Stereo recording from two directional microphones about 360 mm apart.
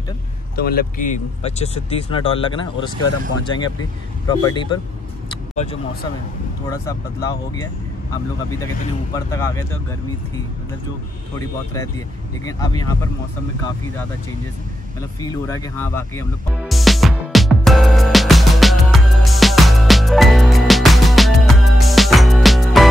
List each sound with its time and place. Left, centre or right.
0.7 s speech: left
4.3 s speech: centre
6.7 s speech: centre
9.1 s speech: centre
11.3 s speech: centre
15.1 s music: centre